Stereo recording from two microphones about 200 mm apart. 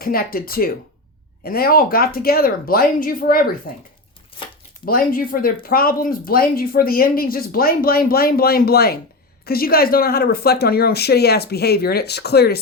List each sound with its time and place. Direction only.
0.0 s speech: 45° left (ahead or behind)
4.3 s crumpling: 25° left (ahead or behind)
4.9 s speech: 45° left (ahead or behind)